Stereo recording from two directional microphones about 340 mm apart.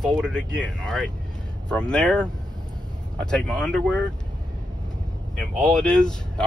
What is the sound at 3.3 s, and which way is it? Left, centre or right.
Speech, centre.